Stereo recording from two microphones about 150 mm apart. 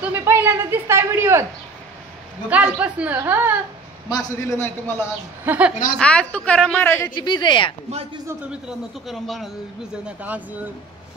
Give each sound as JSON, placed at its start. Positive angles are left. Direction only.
{"t": 0.0, "sound": "speech", "side_deg": -15}
{"t": 2.5, "sound": "speech", "side_deg": -10}
{"t": 4.1, "sound": "a woman's voice", "side_deg": 15}
{"t": 5.4, "sound": "a woman's voice", "side_deg": -10}
{"t": 5.9, "sound": "a woman's voice", "side_deg": 5}
{"t": 7.2, "sound": "a woman's voice", "side_deg": 30}
{"t": 8.5, "sound": "speech", "side_deg": -5}
{"t": 10.0, "sound": "speech", "side_deg": -10}